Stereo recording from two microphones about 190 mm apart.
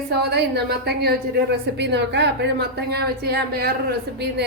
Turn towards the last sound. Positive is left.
turn(degrees=-60)  # may be behind; listen again after turning